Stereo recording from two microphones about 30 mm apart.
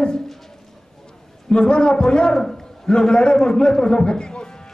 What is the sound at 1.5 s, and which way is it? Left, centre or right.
A man's voice, left.